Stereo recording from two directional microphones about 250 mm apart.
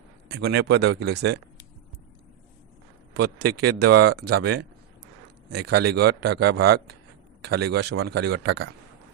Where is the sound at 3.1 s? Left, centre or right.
Right.